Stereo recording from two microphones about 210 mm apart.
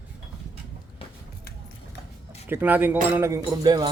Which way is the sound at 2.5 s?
10° right (ahead or behind).